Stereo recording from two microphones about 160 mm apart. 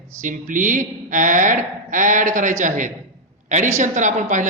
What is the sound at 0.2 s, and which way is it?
A man's voice, 55° right (ahead or behind).